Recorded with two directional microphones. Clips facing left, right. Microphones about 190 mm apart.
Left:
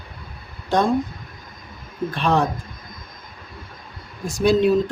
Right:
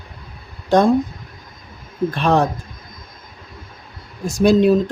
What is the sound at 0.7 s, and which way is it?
Speech, 45° right (ahead or behind).